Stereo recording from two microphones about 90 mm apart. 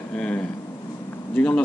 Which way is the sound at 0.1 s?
10° left (ahead or behind).